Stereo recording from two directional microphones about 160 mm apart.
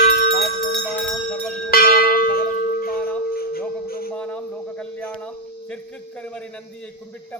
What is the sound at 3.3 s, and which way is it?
Music, 70° left (ahead or behind).